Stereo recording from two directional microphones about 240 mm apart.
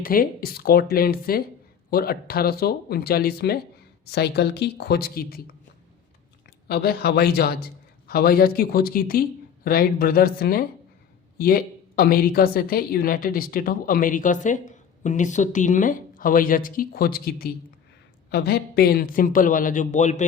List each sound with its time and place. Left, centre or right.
0.0 s a woman's voice: left
6.7 s a woman's voice: left